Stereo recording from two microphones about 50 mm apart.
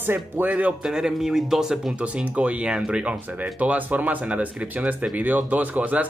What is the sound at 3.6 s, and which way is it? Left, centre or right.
Speech, right.